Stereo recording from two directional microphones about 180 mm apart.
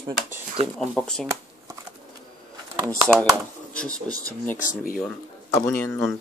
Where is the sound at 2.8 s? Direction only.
15° right (ahead or behind).